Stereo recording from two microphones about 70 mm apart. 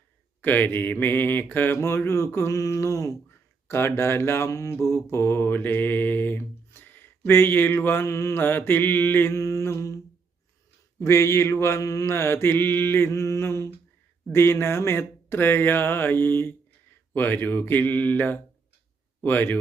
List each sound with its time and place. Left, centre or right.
0.4 s mantra: left
3.7 s mantra: left
8.0 s mantra: left
8.4 s mantra: left
9.3 s mantra: left
11.0 s mantra: left
17.2 s speech: left